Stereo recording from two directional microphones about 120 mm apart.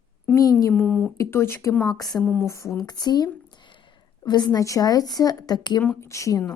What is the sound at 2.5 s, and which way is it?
Speech, 25° left (ahead or behind).